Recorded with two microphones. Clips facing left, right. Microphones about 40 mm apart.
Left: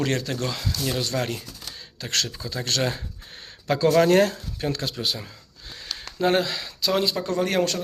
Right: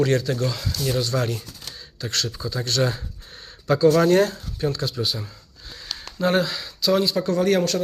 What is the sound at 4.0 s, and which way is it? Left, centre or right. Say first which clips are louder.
Speech: even; left.